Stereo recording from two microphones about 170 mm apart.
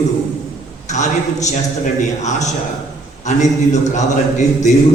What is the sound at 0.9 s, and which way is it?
A man's voice, 45° left (ahead or behind).